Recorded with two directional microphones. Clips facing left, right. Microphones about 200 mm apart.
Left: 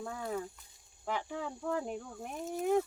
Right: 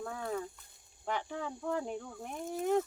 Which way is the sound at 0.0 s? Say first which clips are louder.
Even; 5° left (ahead or behind).